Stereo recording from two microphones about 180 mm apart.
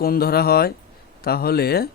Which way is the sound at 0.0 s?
60° left (ahead or behind).